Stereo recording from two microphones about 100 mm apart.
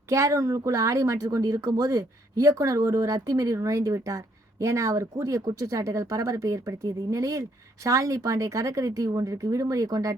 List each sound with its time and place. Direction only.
0.1 s speech: 30° right (ahead or behind)